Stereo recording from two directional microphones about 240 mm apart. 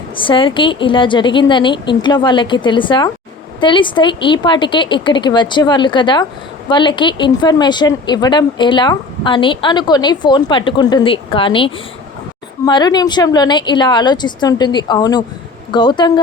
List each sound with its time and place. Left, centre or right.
0.2 s a woman's voice: left